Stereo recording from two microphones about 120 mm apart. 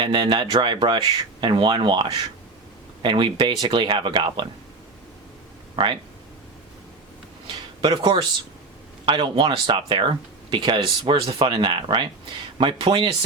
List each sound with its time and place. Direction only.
0.0 s speech: 40° right (ahead or behind)
7.8 s speech: 45° right (ahead or behind)